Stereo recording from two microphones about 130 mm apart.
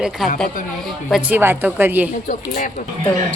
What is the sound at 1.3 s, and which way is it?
Speech, 15° right (ahead or behind).